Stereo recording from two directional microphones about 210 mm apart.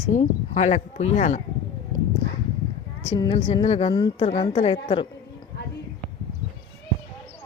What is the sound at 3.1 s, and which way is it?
A woman's voice, 25° left (ahead or behind).